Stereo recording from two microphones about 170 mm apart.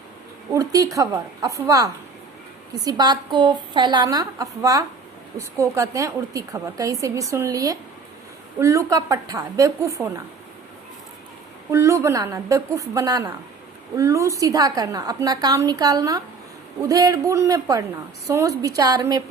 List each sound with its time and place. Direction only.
0.5 s a woman's voice: 20° right (ahead or behind)
11.7 s a woman's voice: 15° right (ahead or behind)